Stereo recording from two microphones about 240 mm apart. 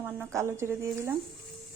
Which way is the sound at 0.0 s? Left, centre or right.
Centre.